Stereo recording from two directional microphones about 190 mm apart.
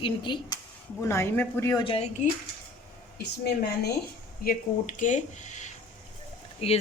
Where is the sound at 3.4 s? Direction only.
60° left (ahead or behind).